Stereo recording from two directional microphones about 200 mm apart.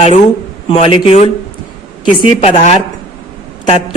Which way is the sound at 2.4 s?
30° left (ahead or behind).